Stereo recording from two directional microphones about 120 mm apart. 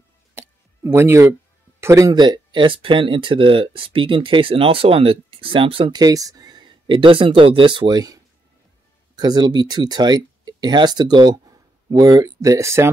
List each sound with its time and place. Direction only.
0.3 s clicking: 20° right (ahead or behind)
1.8 s speech: 25° right (ahead or behind)
2.1 s speech: 40° right (ahead or behind)
5.9 s speech: 30° right (ahead or behind)